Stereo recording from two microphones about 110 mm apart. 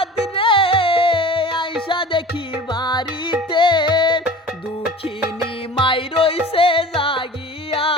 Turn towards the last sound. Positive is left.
turn(degrees=60)  # may be behind; listen again after turning